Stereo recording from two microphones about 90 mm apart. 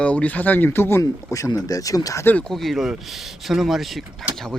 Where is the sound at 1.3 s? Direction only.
40° left (ahead or behind).